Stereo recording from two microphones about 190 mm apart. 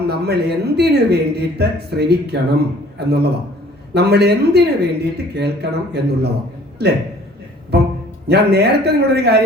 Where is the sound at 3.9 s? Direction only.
60° right (ahead or behind).